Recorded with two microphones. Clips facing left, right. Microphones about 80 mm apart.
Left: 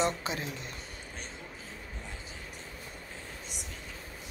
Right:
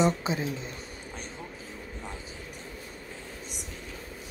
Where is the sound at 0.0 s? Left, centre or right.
Centre.